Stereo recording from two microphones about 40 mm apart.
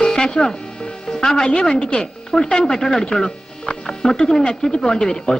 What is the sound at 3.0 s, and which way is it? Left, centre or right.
Music, centre.